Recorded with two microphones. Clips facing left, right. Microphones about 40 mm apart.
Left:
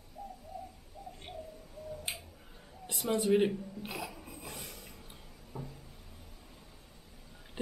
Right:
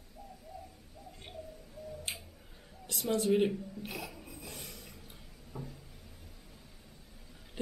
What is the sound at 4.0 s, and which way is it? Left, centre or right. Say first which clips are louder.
Filing: left 2 dB; centre.